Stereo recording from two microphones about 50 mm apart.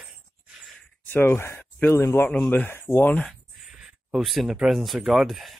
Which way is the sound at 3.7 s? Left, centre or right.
Centre.